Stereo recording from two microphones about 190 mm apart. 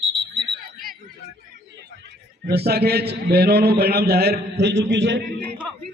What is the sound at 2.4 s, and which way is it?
A man's voice, 55° right (ahead or behind).